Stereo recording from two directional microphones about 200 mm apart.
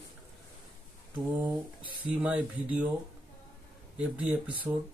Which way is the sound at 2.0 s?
5° right (ahead or behind).